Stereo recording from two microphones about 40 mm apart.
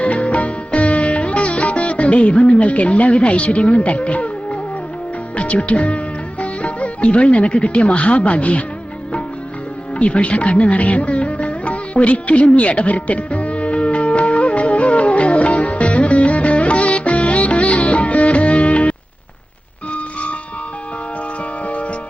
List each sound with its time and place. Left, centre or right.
0.0 s music: left
5.4 s speech: left
9.9 s music: left